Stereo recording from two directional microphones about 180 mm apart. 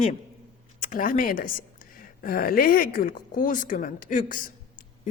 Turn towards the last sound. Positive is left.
turn(degrees=50)  # may be behind; listen again after turning